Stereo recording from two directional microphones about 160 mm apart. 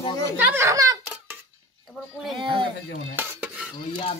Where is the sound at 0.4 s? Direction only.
15° right (ahead or behind).